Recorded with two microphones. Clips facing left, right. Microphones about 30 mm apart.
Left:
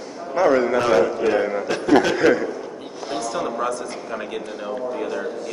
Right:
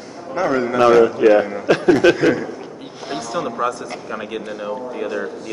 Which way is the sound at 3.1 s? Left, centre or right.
Centre.